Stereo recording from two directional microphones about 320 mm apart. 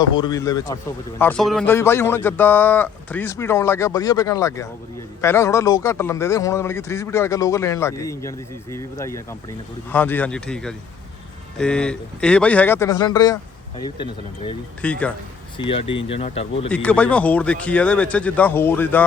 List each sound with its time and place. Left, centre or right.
0.0 s a man's voice: centre
15.5 s a man's voice: centre
16.6 s speech: centre